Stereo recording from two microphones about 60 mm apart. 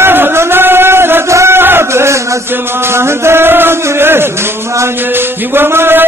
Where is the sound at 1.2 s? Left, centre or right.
Right.